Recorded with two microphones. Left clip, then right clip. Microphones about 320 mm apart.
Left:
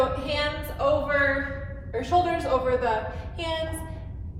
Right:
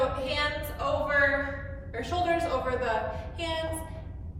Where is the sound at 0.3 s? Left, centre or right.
Centre.